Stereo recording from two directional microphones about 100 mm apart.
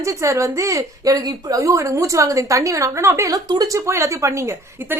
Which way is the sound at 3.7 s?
30° right (ahead or behind).